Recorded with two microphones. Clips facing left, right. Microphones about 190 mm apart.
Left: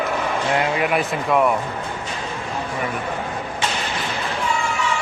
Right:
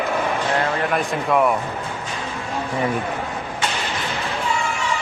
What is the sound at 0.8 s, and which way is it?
Speech, 5° left (ahead or behind).